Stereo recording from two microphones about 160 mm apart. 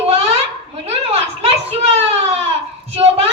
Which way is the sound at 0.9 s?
40° right (ahead or behind).